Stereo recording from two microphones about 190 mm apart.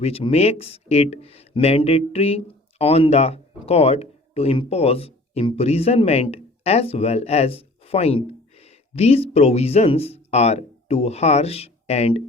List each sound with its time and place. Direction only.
0.0 s speech: 30° left (ahead or behind)